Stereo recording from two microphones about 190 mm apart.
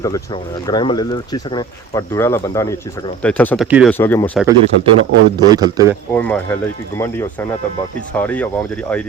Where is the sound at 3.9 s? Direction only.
10° left (ahead or behind).